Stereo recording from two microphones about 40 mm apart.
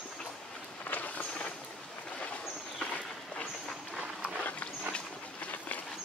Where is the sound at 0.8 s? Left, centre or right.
Left.